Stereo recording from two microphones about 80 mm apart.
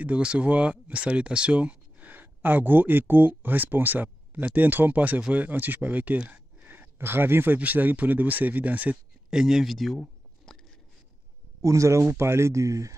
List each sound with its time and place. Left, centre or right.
0.0 s speech: centre
9.3 s speech: centre
9.9 s a sound: centre
11.6 s speech: right